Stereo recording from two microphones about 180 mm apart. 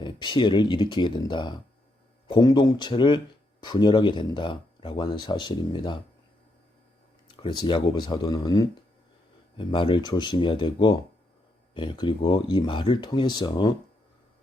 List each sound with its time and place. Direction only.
0.0 s speech: 25° left (ahead or behind)
7.3 s speech: 25° left (ahead or behind)